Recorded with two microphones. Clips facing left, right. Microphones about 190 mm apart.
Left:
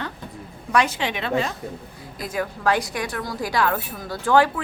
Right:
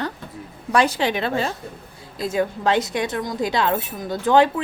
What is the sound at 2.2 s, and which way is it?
Speech, 25° right (ahead or behind).